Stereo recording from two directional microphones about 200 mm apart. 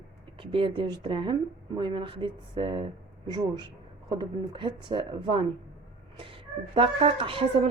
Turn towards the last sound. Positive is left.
turn(degrees=-25)  # may be behind; listen again after turning